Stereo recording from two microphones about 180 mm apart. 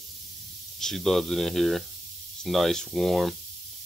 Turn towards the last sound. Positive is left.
turn(degrees=0)  # may be behind; listen again after turning